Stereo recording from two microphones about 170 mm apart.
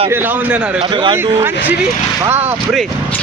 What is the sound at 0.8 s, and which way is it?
Speech, 30° right (ahead or behind).